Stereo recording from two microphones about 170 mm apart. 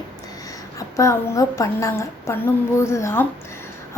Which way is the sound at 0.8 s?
20° left (ahead or behind).